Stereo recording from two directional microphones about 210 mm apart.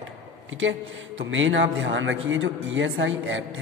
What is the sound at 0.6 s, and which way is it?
A man's voice, 65° right (ahead or behind).